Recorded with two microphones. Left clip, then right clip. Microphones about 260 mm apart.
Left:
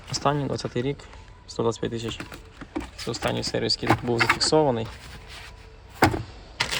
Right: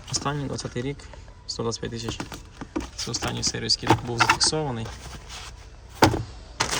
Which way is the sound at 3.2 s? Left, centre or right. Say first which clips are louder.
Left 1 dB; centre.